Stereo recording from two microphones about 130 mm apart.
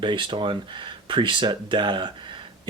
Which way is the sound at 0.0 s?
40° right (ahead or behind).